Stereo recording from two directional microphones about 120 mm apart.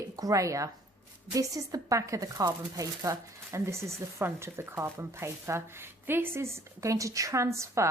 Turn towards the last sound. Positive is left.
turn(degrees=-25)  # may be behind; listen again after turning